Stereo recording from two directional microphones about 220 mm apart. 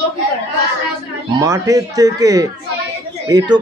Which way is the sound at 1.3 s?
15° right (ahead or behind).